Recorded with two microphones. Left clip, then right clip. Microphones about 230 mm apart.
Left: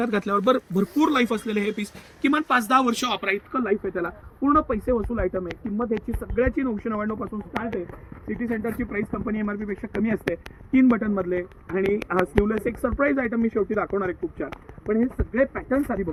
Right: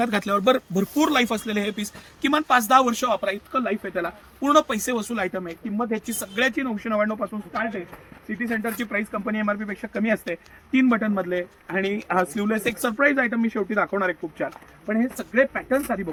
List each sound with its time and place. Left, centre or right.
0.0 s speech: right